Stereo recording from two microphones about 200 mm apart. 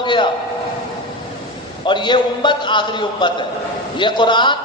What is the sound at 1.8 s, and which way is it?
A man's voice, 25° left (ahead or behind).